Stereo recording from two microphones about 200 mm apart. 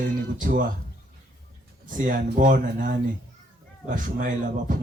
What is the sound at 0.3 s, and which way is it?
Speech, 40° right (ahead or behind).